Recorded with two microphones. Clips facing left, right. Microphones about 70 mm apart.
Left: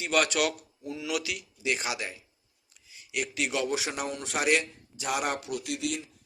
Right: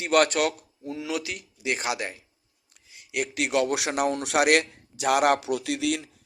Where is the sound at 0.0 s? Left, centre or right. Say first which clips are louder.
Right 5 dB; right.